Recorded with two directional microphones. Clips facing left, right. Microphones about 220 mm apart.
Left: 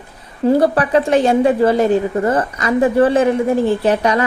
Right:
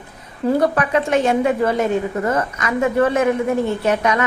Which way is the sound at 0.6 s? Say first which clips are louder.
Left 4 dB; 35° left (ahead or behind).